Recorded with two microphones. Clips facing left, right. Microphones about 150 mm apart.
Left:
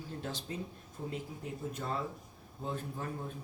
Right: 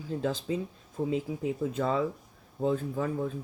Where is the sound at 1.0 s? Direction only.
70° right (ahead or behind).